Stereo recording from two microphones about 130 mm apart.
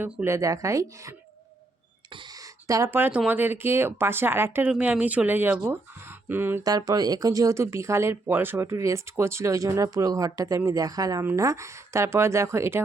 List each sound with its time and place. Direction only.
0.0 s speech: 20° right (ahead or behind)
2.6 s speech: 25° right (ahead or behind)
6.7 s speech: 30° right (ahead or behind)